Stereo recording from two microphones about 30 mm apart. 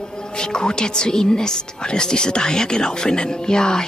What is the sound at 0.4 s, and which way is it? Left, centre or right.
Speech, left.